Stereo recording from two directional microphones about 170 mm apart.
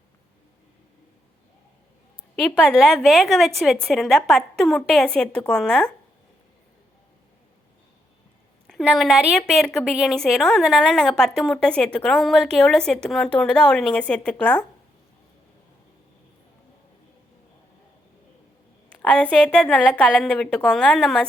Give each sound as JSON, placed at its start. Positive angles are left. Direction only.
{"t": 2.3, "sound": "a woman's voice", "side_deg": 0}
{"t": 8.6, "sound": "a woman's voice", "side_deg": 0}
{"t": 19.0, "sound": "a woman's voice", "side_deg": 5}